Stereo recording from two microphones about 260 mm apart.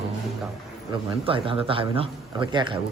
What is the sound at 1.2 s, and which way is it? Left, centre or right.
A man's voice, right.